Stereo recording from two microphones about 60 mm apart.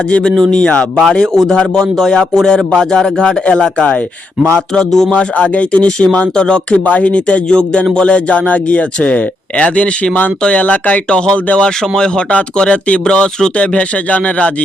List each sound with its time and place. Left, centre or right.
0.1 s speech: centre
5.1 s speech: left